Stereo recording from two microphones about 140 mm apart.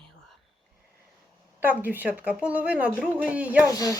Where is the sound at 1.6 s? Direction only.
15° right (ahead or behind).